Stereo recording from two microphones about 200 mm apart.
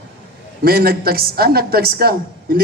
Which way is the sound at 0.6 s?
50° right (ahead or behind).